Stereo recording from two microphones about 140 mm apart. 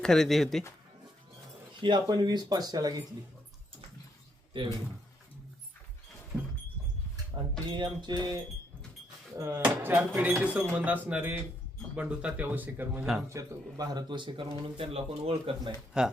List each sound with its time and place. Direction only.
0.0 s speech: 5° left (ahead or behind)
1.8 s speech: 30° right (ahead or behind)
4.5 s speech: 35° right (ahead or behind)
6.3 s a sound: 10° right (ahead or behind)
7.3 s speech: 25° right (ahead or behind)
9.6 s speech: 15° right (ahead or behind)
13.3 s speech: 25° right (ahead or behind); by 15.7 s 45° right (ahead or behind)
15.9 s speech: 5° right (ahead or behind)